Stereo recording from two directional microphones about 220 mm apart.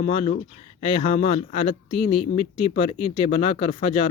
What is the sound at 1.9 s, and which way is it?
Speech, 90° left.